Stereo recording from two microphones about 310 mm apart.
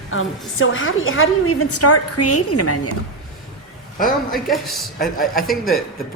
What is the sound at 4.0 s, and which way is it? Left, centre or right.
Speech, centre.